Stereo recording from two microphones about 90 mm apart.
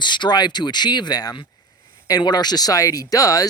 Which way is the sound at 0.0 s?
55° left (ahead or behind).